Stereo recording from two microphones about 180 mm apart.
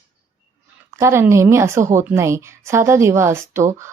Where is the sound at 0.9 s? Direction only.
15° right (ahead or behind).